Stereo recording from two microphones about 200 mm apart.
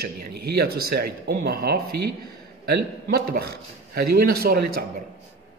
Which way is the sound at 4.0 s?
50° right (ahead or behind).